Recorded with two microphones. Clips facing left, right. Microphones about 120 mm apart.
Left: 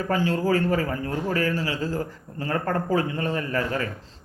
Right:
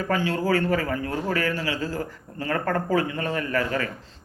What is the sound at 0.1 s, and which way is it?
A man's voice, 35° left (ahead or behind).